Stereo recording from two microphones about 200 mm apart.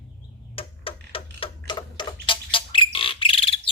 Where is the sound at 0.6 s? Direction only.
25° left (ahead or behind).